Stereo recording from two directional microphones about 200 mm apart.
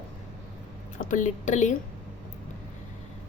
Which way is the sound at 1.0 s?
40° left (ahead or behind).